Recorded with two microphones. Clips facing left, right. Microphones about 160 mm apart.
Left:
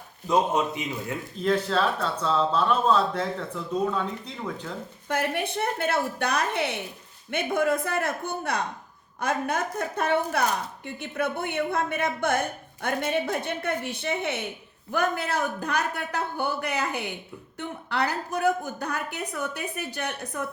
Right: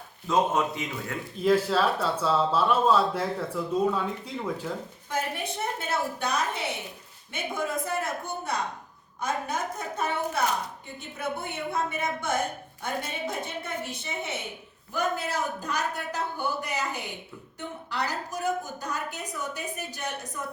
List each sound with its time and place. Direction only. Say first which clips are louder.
0.3 s a man's voice: left 1 dB; 20° left (ahead or behind)
1.4 s speech: right 1 dB; 5° right (ahead or behind)
5.0 s a woman's voice: left 4 dB; 65° left (ahead or behind)